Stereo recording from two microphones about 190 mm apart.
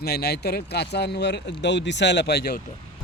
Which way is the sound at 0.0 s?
55° left (ahead or behind).